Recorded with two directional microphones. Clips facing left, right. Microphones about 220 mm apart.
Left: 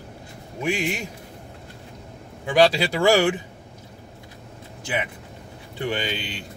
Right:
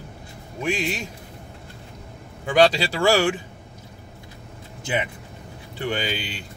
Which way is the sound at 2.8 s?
20° left (ahead or behind).